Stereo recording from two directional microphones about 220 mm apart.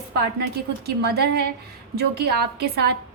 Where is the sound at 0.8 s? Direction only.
45° right (ahead or behind).